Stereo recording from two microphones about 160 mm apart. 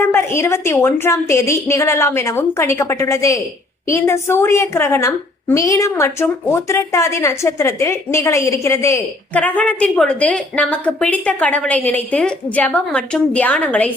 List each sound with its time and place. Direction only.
0.0 s a woman's voice: 15° left (ahead or behind)